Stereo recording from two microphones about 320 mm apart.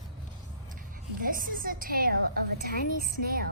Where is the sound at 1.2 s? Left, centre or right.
Right.